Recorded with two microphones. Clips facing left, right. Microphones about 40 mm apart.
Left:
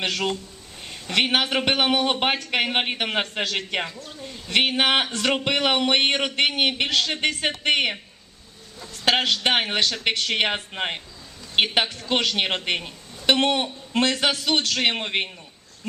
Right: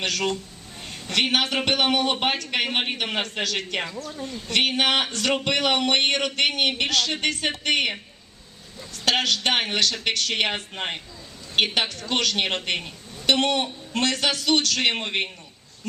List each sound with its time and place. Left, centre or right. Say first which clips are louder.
0.0 s speech: even; centre
14.8 s speech: even; centre